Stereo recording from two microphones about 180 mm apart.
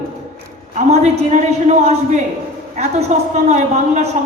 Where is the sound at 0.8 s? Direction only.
40° right (ahead or behind).